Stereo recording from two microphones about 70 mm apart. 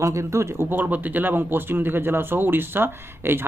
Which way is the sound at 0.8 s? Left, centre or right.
Right.